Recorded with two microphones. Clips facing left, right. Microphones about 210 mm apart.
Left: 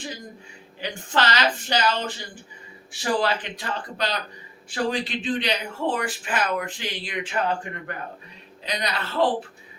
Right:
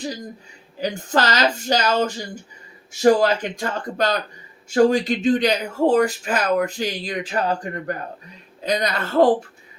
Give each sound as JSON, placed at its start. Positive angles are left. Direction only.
{"t": 0.8, "sound": "speech", "side_deg": -40}